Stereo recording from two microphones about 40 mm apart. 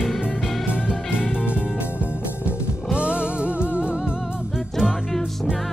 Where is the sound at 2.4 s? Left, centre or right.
Right.